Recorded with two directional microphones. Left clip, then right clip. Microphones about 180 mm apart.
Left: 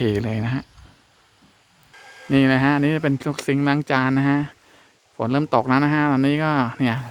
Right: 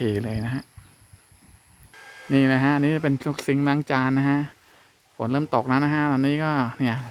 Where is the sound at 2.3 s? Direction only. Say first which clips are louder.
Left 3 dB; 10° left (ahead or behind).